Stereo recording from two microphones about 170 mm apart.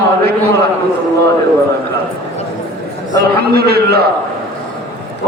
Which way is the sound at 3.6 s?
65° right (ahead or behind).